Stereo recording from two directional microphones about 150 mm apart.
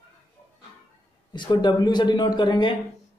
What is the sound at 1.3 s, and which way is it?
Speech, 30° left (ahead or behind).